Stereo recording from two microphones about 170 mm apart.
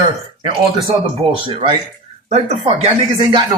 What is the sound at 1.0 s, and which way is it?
Speech, 30° right (ahead or behind).